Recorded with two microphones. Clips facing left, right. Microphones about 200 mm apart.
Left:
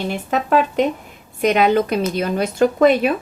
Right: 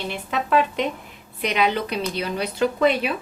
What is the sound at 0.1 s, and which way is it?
A woman's voice, 45° left (ahead or behind).